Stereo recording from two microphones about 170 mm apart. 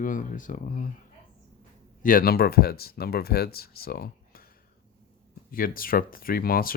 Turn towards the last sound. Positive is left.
turn(degrees=60)  # may be behind; listen again after turning